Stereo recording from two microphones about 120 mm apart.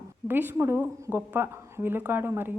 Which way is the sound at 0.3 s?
15° right (ahead or behind).